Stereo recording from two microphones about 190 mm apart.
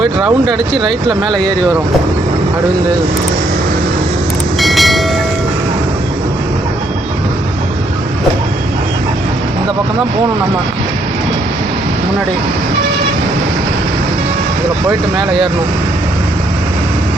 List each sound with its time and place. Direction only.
0.0 s speech: centre (ahead or behind)
4.6 s train: centre (ahead or behind)
14.8 s speech: 25° right (ahead or behind)